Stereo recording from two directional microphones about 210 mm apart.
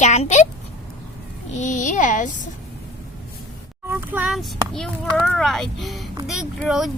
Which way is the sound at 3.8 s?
10° right (ahead or behind).